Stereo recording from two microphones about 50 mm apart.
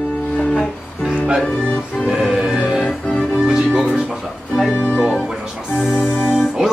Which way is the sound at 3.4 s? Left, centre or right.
Centre.